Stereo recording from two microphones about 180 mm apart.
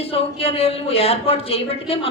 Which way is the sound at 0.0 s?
30° left (ahead or behind).